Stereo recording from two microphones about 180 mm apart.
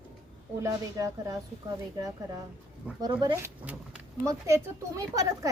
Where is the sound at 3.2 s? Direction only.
20° right (ahead or behind).